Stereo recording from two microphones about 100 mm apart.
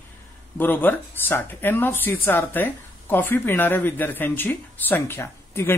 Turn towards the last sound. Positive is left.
turn(degrees=25)  # may be behind; listen again after turning